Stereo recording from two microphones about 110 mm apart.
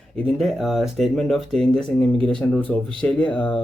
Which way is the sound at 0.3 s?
Centre (ahead or behind).